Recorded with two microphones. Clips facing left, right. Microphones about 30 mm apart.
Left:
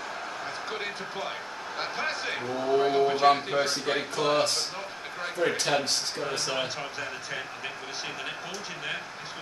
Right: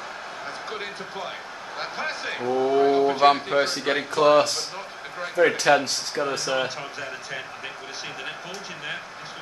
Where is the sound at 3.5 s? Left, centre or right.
Right.